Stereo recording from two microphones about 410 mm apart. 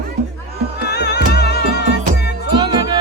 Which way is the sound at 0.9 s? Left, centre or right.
Left.